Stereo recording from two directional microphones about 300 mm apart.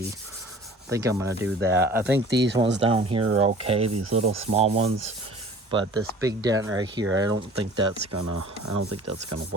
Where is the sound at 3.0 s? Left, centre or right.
Centre.